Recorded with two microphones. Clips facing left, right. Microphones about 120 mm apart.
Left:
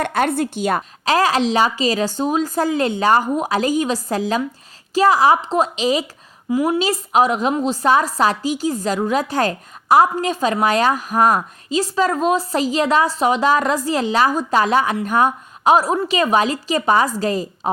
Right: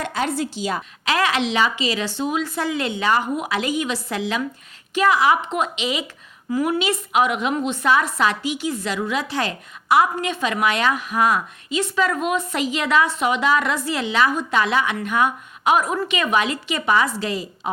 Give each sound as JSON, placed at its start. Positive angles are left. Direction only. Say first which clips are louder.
{"t": 0.0, "sound": "a woman's voice", "louder": "left 5 dB", "side_deg": 55}
{"t": 0.8, "sound": "a woman's voice", "louder": "left 3 dB", "side_deg": 35}
{"t": 6.5, "sound": "a woman's voice", "louder": "left 3 dB", "side_deg": 25}